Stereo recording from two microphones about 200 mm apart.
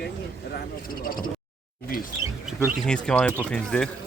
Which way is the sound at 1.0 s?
45° left (ahead or behind).